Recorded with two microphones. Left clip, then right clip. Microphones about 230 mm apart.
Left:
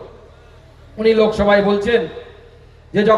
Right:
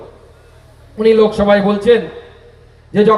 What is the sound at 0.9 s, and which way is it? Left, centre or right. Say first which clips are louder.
A man's voice: right 3 dB; right.